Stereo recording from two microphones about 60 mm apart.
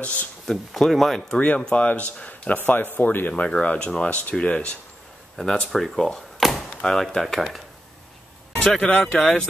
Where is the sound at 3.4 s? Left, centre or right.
Centre.